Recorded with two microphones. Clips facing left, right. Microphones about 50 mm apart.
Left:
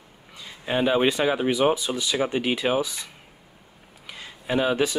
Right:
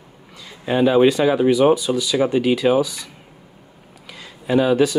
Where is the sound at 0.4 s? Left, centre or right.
Centre.